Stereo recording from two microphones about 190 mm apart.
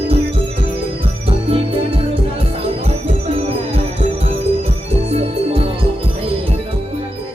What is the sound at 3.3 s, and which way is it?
Music, 35° right (ahead or behind).